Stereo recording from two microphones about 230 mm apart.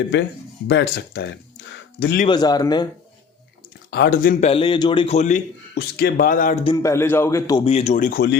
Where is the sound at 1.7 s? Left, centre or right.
Left.